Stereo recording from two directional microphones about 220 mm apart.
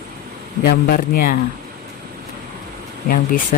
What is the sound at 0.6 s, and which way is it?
Speech, 45° left (ahead or behind).